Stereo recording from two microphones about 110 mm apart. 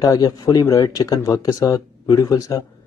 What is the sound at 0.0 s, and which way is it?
Speech, 35° left (ahead or behind).